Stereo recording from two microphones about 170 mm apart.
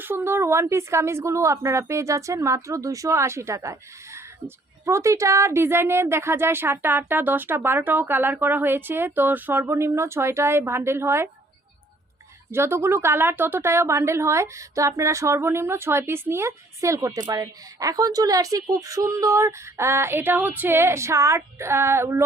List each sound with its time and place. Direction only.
0.0 s a woman's voice: 15° right (ahead or behind)
12.5 s a woman's voice: 15° right (ahead or behind)